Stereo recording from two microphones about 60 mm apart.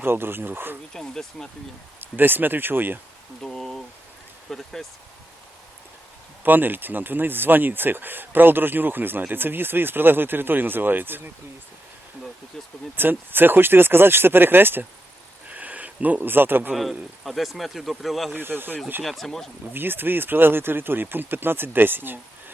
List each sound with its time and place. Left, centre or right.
0.0 s speech: right
0.9 s speech: centre
2.0 s speech: right
3.5 s speech: centre
6.4 s speech: right
13.0 s speech: right
15.4 s a sound: right
17.2 s speech: centre
18.3 s speech: right
19.0 s speech: centre
19.7 s speech: right